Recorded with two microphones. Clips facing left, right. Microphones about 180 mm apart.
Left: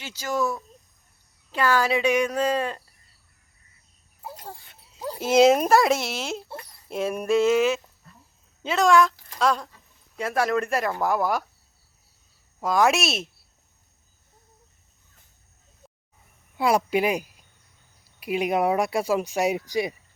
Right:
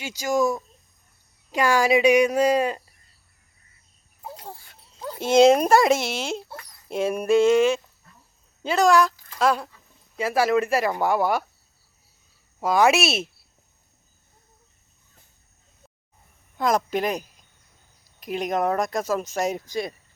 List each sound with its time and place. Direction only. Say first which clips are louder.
0.0 s speech: right 4 dB; 10° right (ahead or behind)
4.6 s dog: left 2 dB; 5° left (ahead or behind)
5.2 s speech: right 2 dB; 5° left (ahead or behind)
6.5 s a sound: left 2 dB; 25° left (ahead or behind)
6.8 s speech: right 3 dB; centre (ahead or behind)
12.5 s speech: right 2 dB; centre (ahead or behind)
16.6 s speech: left 1 dB; 10° left (ahead or behind)